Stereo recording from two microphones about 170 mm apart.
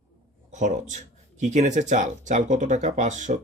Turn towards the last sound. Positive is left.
turn(degrees=-45)  # may be behind; listen again after turning